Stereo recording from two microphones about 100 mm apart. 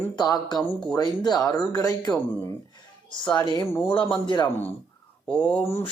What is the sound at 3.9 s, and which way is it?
Speech, 55° left (ahead or behind).